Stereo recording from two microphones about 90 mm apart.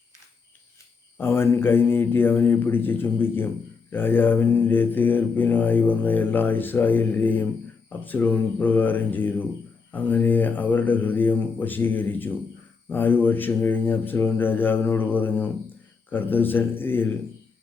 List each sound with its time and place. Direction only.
1.2 s mantra: 25° left (ahead or behind)